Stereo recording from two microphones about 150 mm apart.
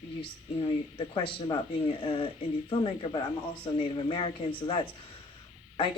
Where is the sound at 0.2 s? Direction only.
35° left (ahead or behind).